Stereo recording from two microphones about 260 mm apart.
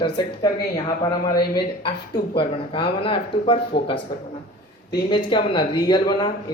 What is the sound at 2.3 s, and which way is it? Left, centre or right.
Speech, centre.